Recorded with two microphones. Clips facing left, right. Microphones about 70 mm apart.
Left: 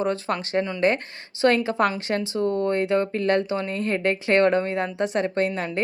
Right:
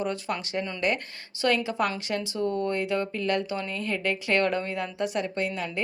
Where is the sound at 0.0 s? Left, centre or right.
Left.